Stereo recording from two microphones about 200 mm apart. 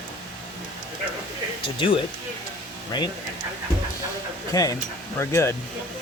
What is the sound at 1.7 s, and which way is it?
Speech, 25° left (ahead or behind).